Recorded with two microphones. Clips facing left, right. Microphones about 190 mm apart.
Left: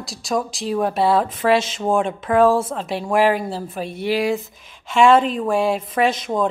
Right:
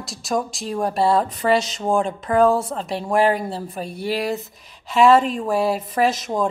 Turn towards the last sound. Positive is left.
turn(degrees=0)  # may be behind; listen again after turning